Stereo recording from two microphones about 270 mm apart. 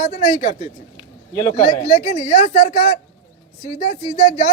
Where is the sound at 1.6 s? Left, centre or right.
Left.